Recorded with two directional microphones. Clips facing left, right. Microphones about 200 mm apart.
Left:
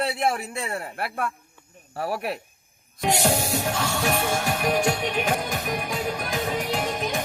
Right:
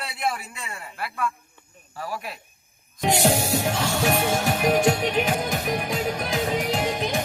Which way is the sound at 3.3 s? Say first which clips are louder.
Right 2 dB; centre (ahead or behind).